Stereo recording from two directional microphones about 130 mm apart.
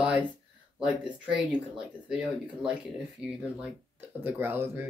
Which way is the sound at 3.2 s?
5° right (ahead or behind).